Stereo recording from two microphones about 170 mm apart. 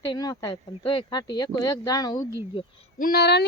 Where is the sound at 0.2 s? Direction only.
25° left (ahead or behind).